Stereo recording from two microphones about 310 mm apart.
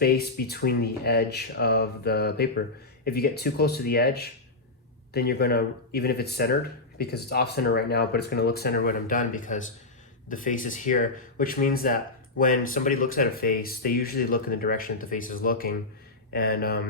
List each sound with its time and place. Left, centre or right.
0.0 s speech: left